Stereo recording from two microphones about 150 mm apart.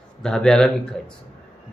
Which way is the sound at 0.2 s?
5° left (ahead or behind).